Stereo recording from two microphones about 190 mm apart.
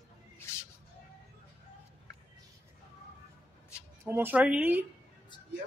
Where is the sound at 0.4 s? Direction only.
15° left (ahead or behind).